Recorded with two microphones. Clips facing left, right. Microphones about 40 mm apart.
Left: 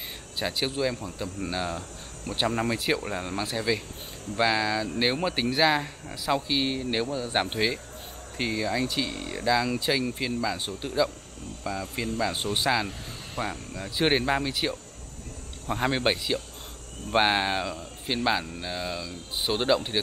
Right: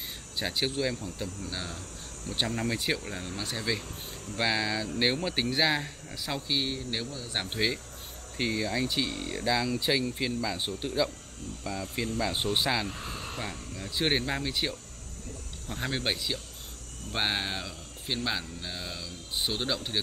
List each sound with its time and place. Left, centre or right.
0.4 s speech: centre
1.5 s speech: centre
2.7 s speech: centre
3.0 s speech: centre
3.4 s speech: centre; by 7.5 s left
7.5 s speech: centre
15.6 s speech: centre